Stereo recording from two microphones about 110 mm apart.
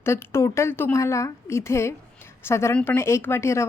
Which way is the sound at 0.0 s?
25° left (ahead or behind).